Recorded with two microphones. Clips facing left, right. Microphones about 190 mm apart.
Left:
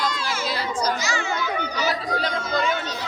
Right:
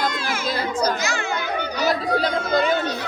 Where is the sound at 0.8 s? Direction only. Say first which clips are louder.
Right 2 dB; 55° right (ahead or behind).